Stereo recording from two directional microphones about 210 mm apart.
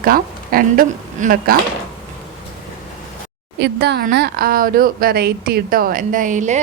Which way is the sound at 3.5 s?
50° right (ahead or behind).